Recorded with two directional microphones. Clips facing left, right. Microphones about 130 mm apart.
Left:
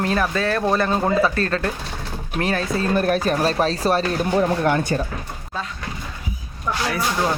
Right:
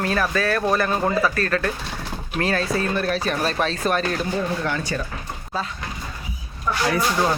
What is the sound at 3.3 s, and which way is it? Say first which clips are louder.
Speech: left 3 dB; 35° left (ahead or behind).